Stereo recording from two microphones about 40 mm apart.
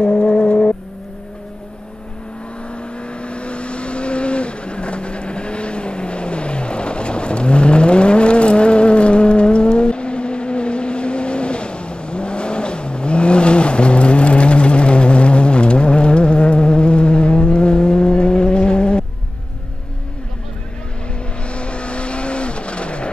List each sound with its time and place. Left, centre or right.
0.0 s vehicle: left
2.7 s vehicle: left
21.5 s vehicle: left